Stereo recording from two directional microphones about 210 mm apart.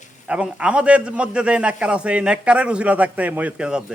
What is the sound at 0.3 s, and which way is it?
A man's voice, 5° right (ahead or behind).